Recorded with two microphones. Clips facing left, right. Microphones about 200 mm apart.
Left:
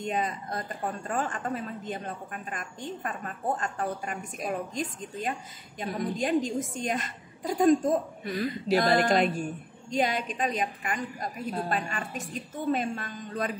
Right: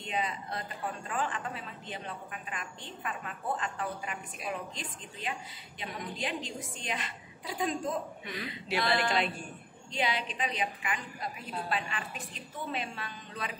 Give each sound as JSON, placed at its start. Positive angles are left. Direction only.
{"t": 0.0, "sound": "a woman's voice", "side_deg": 45}